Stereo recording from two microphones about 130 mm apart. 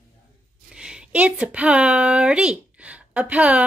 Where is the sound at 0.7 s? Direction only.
5° right (ahead or behind).